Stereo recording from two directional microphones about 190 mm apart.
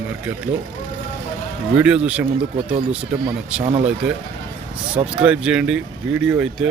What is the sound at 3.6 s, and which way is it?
Speech, 35° right (ahead or behind).